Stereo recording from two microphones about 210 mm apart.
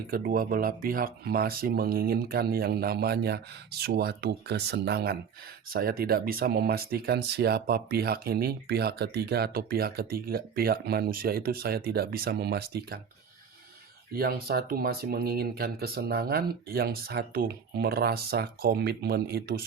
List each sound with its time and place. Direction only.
0.1 s speech: 45° right (ahead or behind)
14.2 s speech: 45° right (ahead or behind)